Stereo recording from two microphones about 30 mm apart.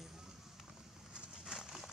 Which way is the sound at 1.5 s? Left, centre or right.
Centre.